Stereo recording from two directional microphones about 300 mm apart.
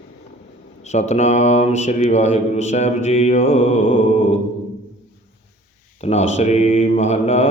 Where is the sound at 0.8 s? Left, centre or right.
Left.